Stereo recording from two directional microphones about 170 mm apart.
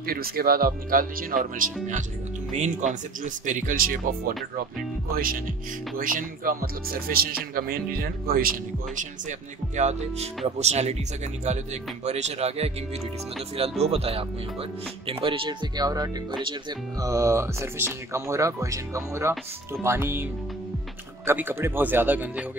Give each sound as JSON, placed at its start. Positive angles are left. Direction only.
{"t": 0.0, "sound": "speech", "side_deg": -60}
{"t": 5.1, "sound": "speech", "side_deg": -55}
{"t": 9.8, "sound": "speech", "side_deg": -40}
{"t": 13.8, "sound": "speech", "side_deg": -35}
{"t": 21.3, "sound": "speech", "side_deg": -15}